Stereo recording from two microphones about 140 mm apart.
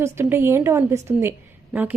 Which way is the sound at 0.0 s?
15° right (ahead or behind).